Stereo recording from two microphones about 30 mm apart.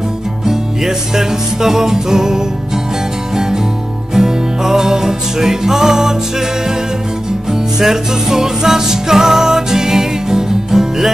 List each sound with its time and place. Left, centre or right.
0.5 s music: centre
7.8 s music: centre